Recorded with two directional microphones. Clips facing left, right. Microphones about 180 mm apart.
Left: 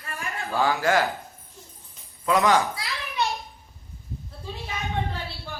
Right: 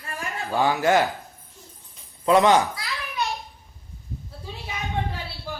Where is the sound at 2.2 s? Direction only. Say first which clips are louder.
Right 4 dB; 25° right (ahead or behind).